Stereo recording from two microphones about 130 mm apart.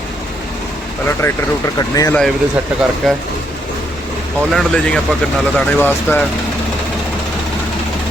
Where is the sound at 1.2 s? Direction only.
15° left (ahead or behind).